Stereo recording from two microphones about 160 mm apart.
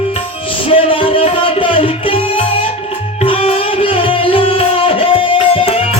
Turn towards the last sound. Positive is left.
turn(degrees=35)  # may be behind; listen again after turning